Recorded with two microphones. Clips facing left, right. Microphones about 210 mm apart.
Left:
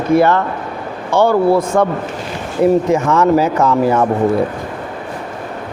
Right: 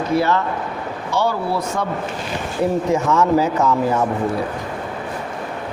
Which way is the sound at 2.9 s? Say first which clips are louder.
Left 4 dB; 60° left (ahead or behind).